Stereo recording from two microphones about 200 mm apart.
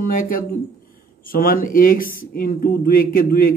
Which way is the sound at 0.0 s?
45° left (ahead or behind).